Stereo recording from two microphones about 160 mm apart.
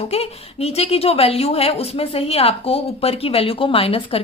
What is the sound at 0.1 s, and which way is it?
A woman's voice, 40° left (ahead or behind).